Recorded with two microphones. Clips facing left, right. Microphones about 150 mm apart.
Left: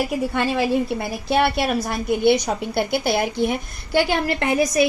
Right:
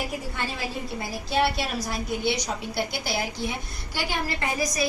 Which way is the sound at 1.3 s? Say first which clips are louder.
Left 6 dB; 60° left (ahead or behind).